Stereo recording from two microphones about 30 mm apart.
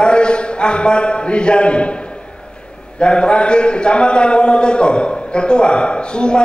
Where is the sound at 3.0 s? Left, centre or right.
Left.